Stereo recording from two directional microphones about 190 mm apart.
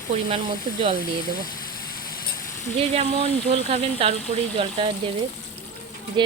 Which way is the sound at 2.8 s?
30° right (ahead or behind).